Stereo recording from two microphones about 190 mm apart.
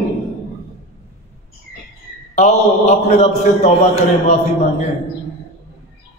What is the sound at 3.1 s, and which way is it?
Speech, 35° left (ahead or behind).